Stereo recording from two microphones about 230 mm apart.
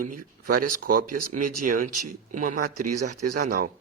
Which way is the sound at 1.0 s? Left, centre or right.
Right.